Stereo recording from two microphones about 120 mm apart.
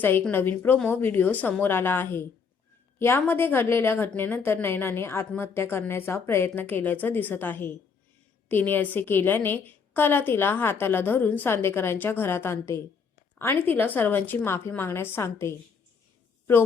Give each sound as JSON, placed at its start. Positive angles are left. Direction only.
{"t": 0.0, "sound": "a woman's voice", "side_deg": 15}